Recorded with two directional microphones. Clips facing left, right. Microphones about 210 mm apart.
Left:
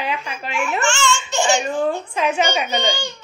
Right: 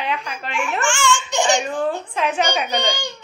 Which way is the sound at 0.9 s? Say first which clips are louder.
Even; 15° right (ahead or behind).